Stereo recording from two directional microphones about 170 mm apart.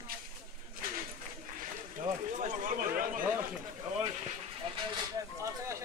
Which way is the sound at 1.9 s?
50° right (ahead or behind).